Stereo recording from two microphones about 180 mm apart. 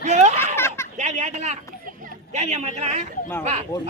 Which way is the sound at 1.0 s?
40° right (ahead or behind).